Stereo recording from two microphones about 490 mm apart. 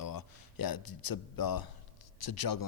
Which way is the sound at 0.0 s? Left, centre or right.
Left.